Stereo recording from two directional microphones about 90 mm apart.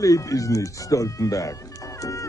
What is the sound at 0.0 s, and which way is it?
Music, 40° left (ahead or behind).